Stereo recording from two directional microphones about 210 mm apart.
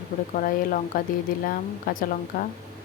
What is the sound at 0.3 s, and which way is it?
Speech, 40° left (ahead or behind).